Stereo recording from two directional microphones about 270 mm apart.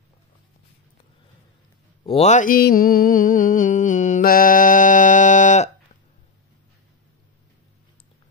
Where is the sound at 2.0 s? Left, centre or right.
Left.